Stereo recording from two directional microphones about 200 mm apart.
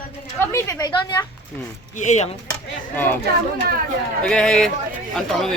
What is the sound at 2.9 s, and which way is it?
Speech, 10° left (ahead or behind).